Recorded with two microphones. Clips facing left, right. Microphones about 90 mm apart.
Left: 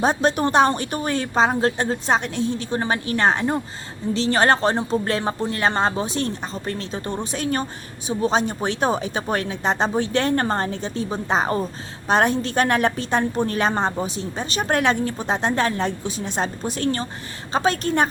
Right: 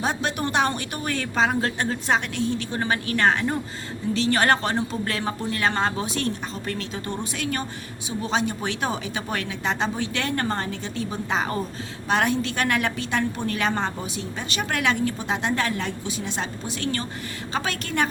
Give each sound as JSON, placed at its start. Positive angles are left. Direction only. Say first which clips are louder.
{"t": 0.0, "sound": "a woman's voice", "louder": "left 6 dB", "side_deg": 35}